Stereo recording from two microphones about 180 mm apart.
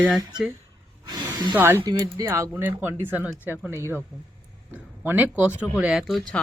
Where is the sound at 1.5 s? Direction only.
10° right (ahead or behind).